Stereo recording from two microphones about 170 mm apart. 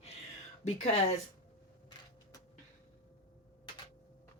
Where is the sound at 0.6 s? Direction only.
40° left (ahead or behind).